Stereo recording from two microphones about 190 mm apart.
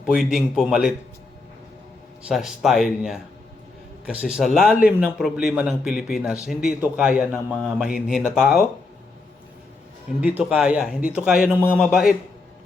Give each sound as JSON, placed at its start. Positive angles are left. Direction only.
{"t": 0.0, "sound": "a man's voice", "side_deg": 0}
{"t": 2.2, "sound": "a man's voice", "side_deg": 0}
{"t": 10.2, "sound": "a man's voice", "side_deg": -5}